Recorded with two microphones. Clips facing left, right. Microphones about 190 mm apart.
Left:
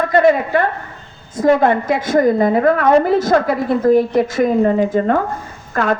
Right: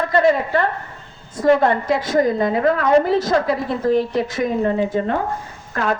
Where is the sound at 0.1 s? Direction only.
55° left (ahead or behind).